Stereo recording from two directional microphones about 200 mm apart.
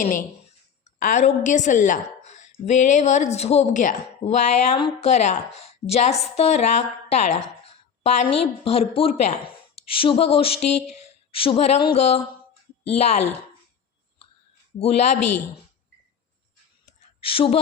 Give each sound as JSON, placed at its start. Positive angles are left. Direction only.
{"t": 0.9, "sound": "a woman's voice", "side_deg": 40}
{"t": 14.8, "sound": "a woman's voice", "side_deg": 30}
{"t": 17.0, "sound": "a sound", "side_deg": 30}